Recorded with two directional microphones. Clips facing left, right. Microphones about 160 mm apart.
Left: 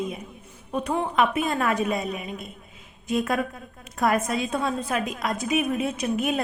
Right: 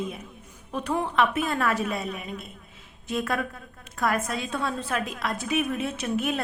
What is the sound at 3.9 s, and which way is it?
A woman's voice, 20° left (ahead or behind).